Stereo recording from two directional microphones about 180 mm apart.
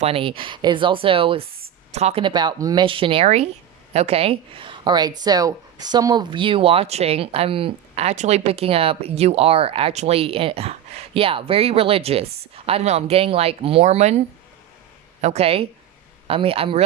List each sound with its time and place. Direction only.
0.0 s speech: 30° right (ahead or behind)
15.2 s speech: 35° right (ahead or behind)